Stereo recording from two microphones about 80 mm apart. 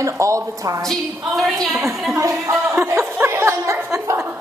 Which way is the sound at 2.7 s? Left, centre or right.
Right.